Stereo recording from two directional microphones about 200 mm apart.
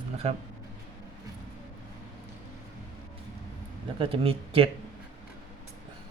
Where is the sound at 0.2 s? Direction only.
30° right (ahead or behind).